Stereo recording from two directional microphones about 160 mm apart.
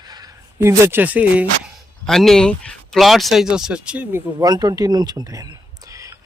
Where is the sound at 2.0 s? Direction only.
Centre (ahead or behind).